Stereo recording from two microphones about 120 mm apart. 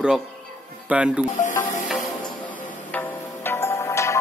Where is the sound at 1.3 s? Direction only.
90° left.